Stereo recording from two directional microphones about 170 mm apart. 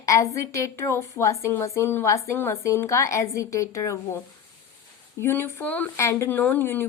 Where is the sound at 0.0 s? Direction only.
20° left (ahead or behind).